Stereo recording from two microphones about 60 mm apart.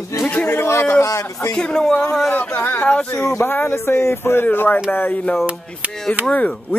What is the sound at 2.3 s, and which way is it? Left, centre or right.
Speech, left.